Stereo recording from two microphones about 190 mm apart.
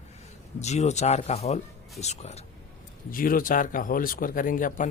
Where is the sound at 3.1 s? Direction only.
50° left (ahead or behind).